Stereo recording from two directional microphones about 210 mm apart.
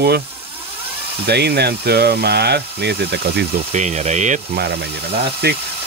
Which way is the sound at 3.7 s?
35° right (ahead or behind).